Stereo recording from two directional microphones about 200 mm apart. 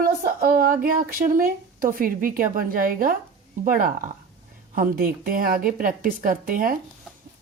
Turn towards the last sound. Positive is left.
turn(degrees=-45)  # may be behind; listen again after turning